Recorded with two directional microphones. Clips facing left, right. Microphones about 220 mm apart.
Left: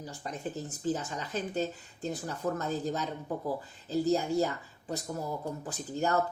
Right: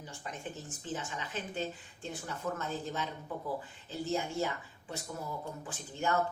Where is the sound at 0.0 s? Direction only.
35° left (ahead or behind).